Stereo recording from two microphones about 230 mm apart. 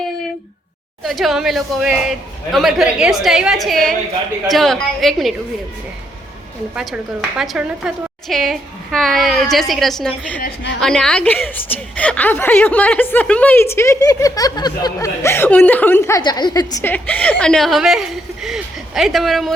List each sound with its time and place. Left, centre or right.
1.0 s a woman's voice: centre
6.7 s a woman's voice: centre
10.4 s a woman's voice: left
10.8 s a woman's voice: centre